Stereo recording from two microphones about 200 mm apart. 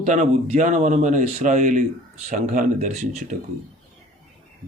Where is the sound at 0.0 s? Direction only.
40° right (ahead or behind).